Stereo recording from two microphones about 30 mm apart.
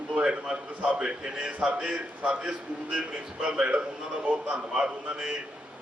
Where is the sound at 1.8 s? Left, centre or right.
Right.